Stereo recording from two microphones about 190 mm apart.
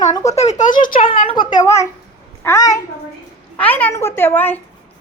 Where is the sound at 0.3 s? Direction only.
35° left (ahead or behind).